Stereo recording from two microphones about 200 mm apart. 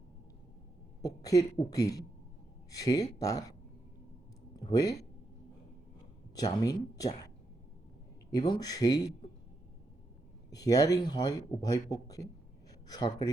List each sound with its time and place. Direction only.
1.0 s speech: 15° left (ahead or behind)
4.5 s speech: 20° left (ahead or behind)
6.3 s speech: 20° left (ahead or behind)
8.3 s speech: 20° left (ahead or behind)
10.5 s speech: 20° left (ahead or behind)